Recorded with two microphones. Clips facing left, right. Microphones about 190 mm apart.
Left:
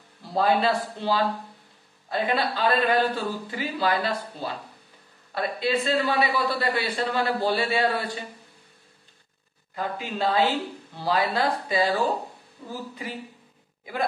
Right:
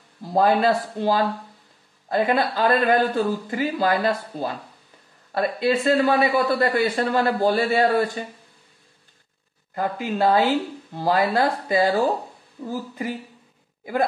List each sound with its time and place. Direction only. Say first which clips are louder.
0.2 s speech: right 4 dB; 45° right (ahead or behind)
9.8 s speech: right 5 dB; 50° right (ahead or behind)
12.6 s speech: right 8 dB; 40° right (ahead or behind)